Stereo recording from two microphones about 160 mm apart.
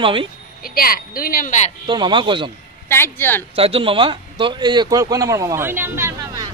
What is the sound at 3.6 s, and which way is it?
A man's voice, 35° right (ahead or behind).